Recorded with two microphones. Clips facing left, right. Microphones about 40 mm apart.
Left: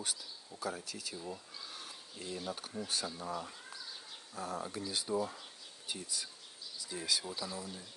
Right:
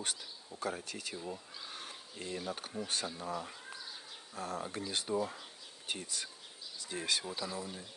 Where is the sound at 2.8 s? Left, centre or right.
Right.